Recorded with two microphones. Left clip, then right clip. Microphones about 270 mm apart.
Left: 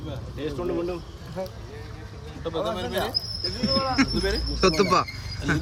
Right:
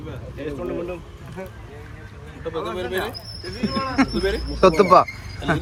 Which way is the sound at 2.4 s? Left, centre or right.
Left.